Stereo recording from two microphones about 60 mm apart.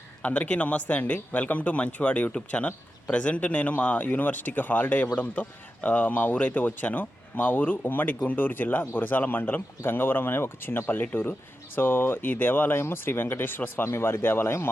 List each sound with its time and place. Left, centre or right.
0.2 s speech: left